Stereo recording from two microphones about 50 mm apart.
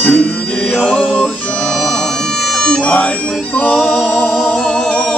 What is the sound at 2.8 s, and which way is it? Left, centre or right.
Music, left.